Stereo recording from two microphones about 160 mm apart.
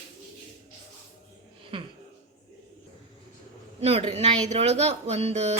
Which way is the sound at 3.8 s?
40° right (ahead or behind).